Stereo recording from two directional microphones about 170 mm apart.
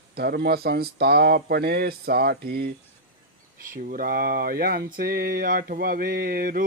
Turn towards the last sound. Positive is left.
turn(degrees=-60)  # may be behind; listen again after turning